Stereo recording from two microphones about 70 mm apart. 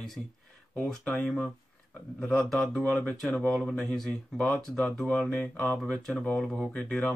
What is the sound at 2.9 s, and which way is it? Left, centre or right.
Speech, left.